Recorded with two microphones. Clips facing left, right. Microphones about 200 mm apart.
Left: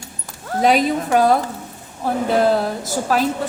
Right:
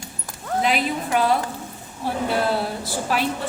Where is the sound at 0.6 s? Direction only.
40° left (ahead or behind).